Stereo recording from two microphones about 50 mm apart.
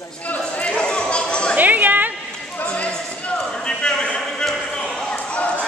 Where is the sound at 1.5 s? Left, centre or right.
Right.